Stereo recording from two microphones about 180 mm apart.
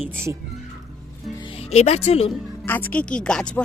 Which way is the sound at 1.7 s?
35° left (ahead or behind).